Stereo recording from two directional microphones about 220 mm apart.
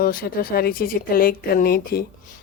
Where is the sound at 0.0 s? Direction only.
40° left (ahead or behind).